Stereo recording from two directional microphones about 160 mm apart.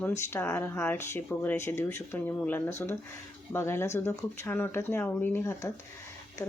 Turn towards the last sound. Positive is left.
turn(degrees=15)  # may be behind; listen again after turning